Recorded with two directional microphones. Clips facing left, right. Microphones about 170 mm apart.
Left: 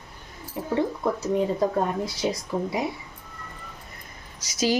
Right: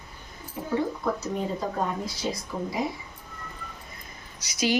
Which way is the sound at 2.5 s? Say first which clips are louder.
Left 5 dB; 65° left (ahead or behind).